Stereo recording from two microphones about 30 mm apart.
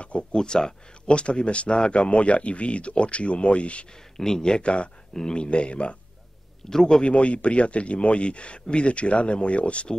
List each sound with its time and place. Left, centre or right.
0.0 s a sound: left
0.3 s speech: left
1.1 s speech: left
4.2 s speech: left
6.7 s a man's voice: centre
7.0 s speech: left